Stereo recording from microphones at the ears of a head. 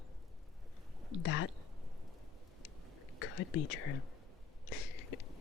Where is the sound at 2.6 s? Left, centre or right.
Left.